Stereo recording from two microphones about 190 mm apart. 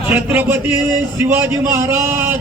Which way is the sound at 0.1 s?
10° right (ahead or behind).